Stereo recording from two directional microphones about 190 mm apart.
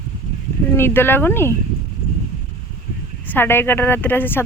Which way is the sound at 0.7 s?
10° left (ahead or behind).